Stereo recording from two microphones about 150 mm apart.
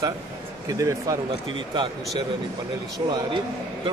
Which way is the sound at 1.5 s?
35° right (ahead or behind).